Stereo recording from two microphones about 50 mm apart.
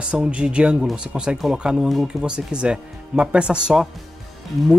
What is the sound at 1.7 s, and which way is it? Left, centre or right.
Speech, centre.